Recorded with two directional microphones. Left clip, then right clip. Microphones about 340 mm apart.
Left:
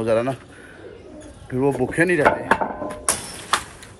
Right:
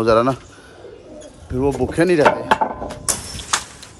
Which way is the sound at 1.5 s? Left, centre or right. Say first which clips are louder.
Right 1 dB; centre.